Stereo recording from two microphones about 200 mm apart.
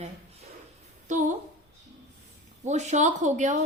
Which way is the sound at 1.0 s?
35° right (ahead or behind).